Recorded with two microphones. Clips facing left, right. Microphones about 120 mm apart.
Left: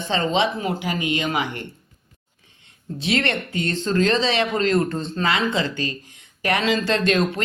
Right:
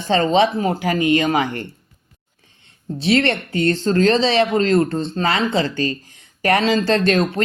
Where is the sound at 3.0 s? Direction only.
35° right (ahead or behind).